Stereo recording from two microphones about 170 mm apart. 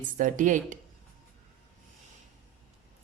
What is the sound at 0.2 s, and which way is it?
Speech, 50° right (ahead or behind).